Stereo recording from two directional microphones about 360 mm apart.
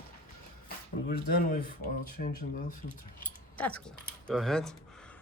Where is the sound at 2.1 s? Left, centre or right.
Left.